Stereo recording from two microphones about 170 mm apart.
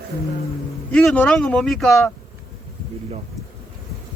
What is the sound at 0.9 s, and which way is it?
Speech, 5° left (ahead or behind).